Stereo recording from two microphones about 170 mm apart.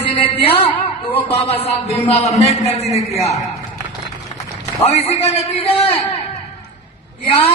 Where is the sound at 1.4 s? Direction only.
35° left (ahead or behind).